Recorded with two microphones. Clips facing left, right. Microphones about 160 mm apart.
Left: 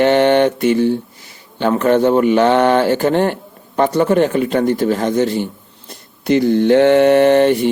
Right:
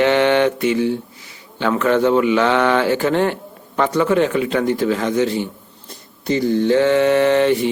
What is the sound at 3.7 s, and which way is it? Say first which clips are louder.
Speech: left 3 dB; 35° left (ahead or behind).